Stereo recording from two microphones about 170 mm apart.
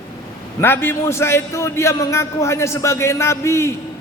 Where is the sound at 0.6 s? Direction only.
15° left (ahead or behind).